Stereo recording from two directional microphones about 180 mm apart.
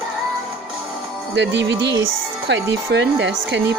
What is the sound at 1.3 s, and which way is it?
Speech, 85° right.